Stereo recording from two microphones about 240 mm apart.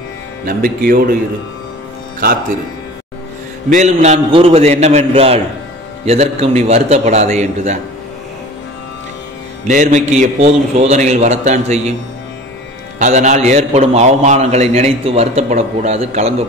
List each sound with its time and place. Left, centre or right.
0.5 s speech: right
3.7 s a man's voice: right
9.7 s a man's voice: right
13.0 s a man's voice: right